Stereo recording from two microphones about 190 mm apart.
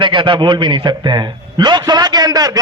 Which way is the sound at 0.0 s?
25° right (ahead or behind).